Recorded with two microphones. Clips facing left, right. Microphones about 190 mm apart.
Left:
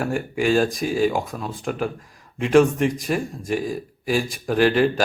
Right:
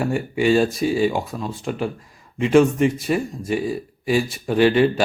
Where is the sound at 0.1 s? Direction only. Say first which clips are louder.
Right 2 dB; centre (ahead or behind).